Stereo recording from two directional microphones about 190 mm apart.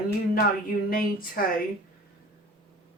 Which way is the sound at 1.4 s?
55° left (ahead or behind).